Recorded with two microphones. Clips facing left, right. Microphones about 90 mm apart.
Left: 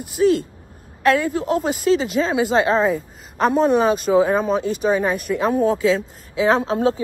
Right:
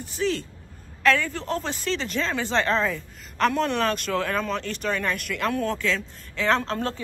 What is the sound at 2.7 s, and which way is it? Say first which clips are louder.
Speech: left 6 dB; 40° left (ahead or behind).